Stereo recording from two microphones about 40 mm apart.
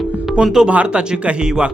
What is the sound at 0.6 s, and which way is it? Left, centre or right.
Speech, right.